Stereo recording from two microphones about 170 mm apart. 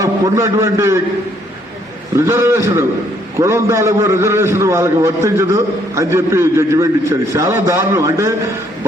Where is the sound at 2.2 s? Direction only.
15° right (ahead or behind).